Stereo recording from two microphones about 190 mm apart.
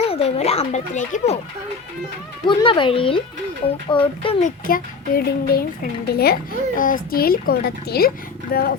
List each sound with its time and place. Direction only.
0.0 s speech: 30° left (ahead or behind)
2.5 s speech: 25° left (ahead or behind)
4.4 s a child's voice: 45° left (ahead or behind)
6.7 s a child's voice: 45° left (ahead or behind)